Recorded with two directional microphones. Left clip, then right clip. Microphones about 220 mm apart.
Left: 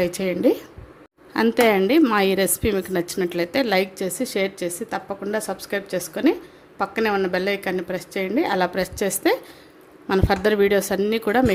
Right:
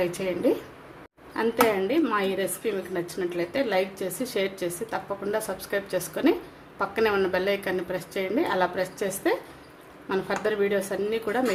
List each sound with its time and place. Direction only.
0.0 s a woman's voice: 40° left (ahead or behind)